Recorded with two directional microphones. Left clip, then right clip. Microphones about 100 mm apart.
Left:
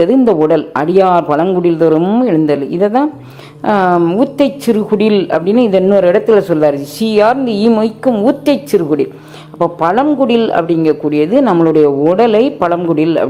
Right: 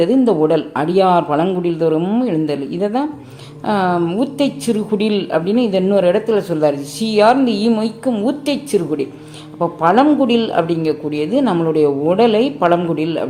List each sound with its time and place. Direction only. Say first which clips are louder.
0.0 s a woman's voice: left 4 dB; 40° left (ahead or behind)